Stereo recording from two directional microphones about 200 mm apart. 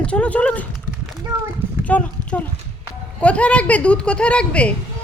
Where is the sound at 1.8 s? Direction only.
5° left (ahead or behind).